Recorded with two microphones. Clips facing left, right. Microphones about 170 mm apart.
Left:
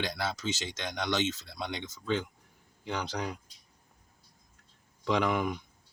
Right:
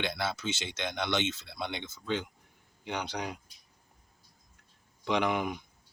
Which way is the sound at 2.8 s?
60° right (ahead or behind).